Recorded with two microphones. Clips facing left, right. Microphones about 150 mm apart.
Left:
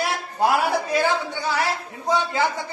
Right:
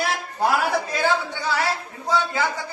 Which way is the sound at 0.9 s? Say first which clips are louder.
Left 1 dB; 15° left (ahead or behind).